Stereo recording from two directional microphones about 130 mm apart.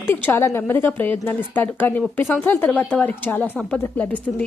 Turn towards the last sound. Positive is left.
turn(degrees=10)  # may be behind; listen again after turning